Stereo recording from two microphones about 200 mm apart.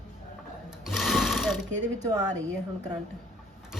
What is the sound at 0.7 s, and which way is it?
Sewing machine, centre (ahead or behind).